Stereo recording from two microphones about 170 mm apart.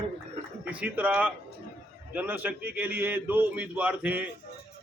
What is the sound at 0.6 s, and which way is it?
A man's voice, 10° right (ahead or behind).